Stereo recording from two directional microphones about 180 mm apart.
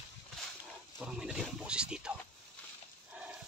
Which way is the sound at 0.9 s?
Centre (ahead or behind).